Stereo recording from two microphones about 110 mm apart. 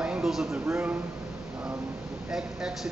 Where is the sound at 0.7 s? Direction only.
20° right (ahead or behind).